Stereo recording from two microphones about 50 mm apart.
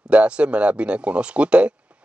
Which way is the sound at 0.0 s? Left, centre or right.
Right.